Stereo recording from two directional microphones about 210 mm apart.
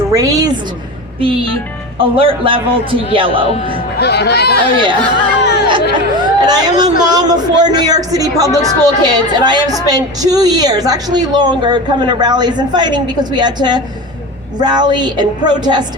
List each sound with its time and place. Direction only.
0.1 s a woman's voice: 15° right (ahead or behind)
2.0 s a man's voice: 25° right (ahead or behind)
3.9 s speech: 50° left (ahead or behind)
5.1 s a sound: 50° left (ahead or behind)
5.9 s a man's voice: 20° right (ahead or behind)